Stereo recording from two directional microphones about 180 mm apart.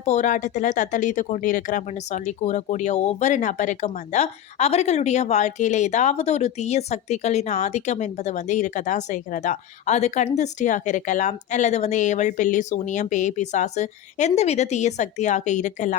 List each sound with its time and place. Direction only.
0.0 s speech: 45° left (ahead or behind)